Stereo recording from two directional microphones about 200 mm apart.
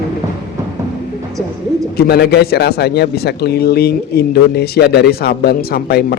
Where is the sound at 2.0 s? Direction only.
55° left (ahead or behind).